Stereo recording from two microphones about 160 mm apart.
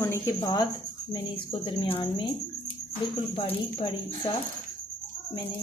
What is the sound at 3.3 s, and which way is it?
Speech, 35° left (ahead or behind).